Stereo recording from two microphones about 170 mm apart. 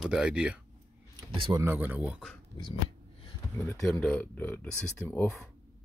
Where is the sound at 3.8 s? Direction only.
5° left (ahead or behind).